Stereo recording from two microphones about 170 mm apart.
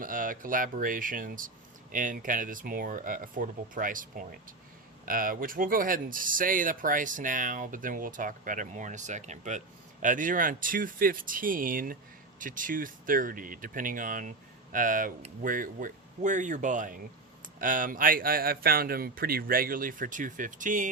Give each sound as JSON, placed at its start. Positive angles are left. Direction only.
{"t": 0.0, "sound": "speech", "side_deg": -55}